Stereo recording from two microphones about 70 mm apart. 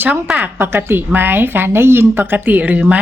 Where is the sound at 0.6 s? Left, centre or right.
Right.